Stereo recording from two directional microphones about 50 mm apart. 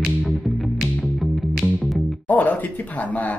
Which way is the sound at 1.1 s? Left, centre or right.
Centre.